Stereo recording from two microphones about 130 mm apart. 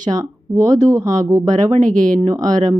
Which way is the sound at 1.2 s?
25° right (ahead or behind).